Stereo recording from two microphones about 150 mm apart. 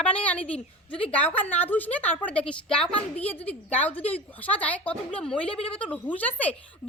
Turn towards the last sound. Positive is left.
turn(degrees=10)  # may be behind; listen again after turning